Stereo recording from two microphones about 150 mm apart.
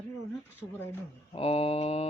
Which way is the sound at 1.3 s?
40° left (ahead or behind).